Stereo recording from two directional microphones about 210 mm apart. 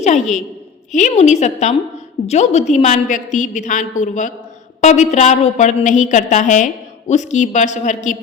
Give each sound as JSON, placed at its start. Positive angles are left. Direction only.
{"t": 0.0, "sound": "a woman's voice", "side_deg": 35}